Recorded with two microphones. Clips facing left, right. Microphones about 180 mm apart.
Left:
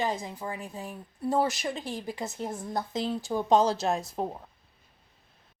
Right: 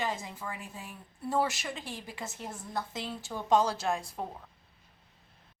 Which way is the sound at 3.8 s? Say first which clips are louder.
Left 4 dB; 35° left (ahead or behind).